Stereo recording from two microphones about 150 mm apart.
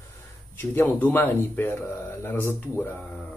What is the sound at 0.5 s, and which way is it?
Speech, 15° left (ahead or behind).